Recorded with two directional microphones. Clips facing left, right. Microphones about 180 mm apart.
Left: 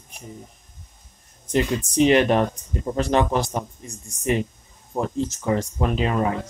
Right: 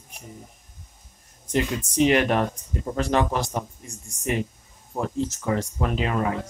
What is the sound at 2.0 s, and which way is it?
Speech, 25° left (ahead or behind).